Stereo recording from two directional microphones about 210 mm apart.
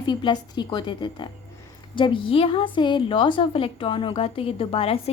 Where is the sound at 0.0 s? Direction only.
20° left (ahead or behind).